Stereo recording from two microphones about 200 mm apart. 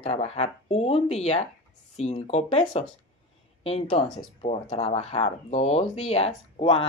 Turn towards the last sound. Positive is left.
turn(degrees=25)  # may be behind; listen again after turning